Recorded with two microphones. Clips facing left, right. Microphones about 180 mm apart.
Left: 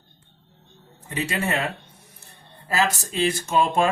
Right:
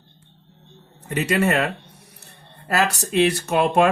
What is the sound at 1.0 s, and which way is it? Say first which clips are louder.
Speech: right 6 dB; 70° right (ahead or behind).